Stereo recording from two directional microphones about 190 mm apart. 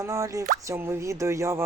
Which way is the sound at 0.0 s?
15° right (ahead or behind).